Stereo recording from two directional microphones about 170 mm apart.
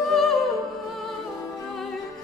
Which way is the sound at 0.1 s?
Centre (ahead or behind).